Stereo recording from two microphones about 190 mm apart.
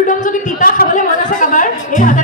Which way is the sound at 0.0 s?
45° left (ahead or behind).